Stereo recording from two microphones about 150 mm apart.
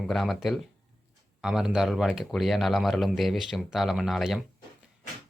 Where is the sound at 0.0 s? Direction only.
Centre (ahead or behind).